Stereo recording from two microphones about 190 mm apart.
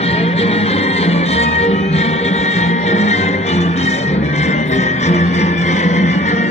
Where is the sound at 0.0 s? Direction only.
35° left (ahead or behind).